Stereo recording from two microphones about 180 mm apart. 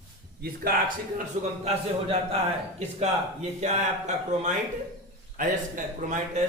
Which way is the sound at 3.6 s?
40° right (ahead or behind).